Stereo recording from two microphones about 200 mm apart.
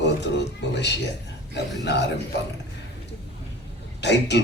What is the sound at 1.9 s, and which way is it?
Speech, 60° left (ahead or behind).